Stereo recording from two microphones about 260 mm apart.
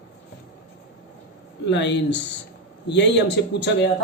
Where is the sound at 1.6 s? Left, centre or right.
Left.